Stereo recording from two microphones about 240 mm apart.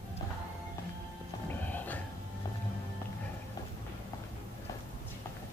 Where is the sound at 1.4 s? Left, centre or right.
Centre.